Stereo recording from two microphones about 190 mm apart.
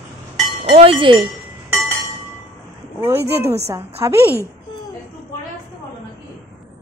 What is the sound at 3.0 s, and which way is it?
Speech, 15° right (ahead or behind).